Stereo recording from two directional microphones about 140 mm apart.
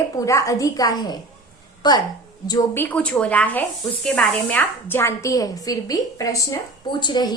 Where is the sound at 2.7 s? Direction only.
15° left (ahead or behind).